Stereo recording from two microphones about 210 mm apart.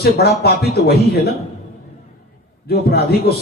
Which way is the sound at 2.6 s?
50° left (ahead or behind).